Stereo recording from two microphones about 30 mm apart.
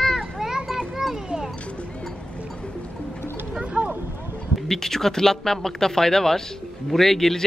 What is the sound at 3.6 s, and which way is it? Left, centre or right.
Vehicle, right.